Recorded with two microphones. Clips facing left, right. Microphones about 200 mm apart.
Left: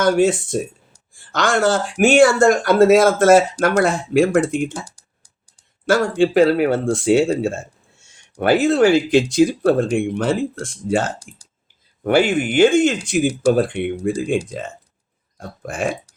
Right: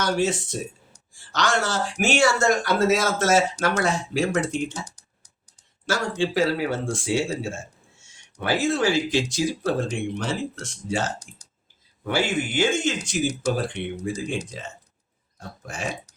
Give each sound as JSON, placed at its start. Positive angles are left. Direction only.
{"t": 0.0, "sound": "speech", "side_deg": 50}
{"t": 4.9, "sound": "a sound", "side_deg": 10}
{"t": 5.8, "sound": "speech", "side_deg": 55}
{"t": 15.4, "sound": "burping", "side_deg": 55}